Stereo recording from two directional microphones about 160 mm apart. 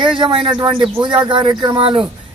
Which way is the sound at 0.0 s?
30° right (ahead or behind).